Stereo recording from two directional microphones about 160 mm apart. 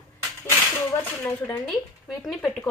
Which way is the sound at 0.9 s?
10° left (ahead or behind).